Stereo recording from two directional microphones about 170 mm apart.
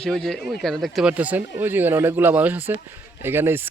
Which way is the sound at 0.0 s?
5° left (ahead or behind).